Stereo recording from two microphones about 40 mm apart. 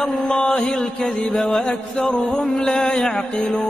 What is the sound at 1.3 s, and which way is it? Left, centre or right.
Mantra, centre.